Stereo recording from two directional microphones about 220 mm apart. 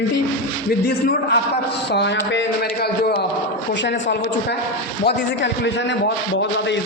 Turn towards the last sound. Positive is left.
turn(degrees=55)  # may be behind; listen again after turning